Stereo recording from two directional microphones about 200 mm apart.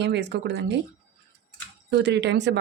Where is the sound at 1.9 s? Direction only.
60° right (ahead or behind).